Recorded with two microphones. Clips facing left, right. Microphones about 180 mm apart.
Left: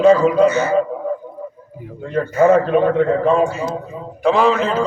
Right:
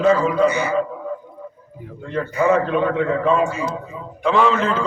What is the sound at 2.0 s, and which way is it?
A man's voice, 45° left (ahead or behind).